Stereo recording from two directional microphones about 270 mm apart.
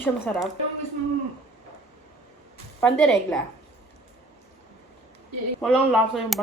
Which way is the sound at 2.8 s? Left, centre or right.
Centre.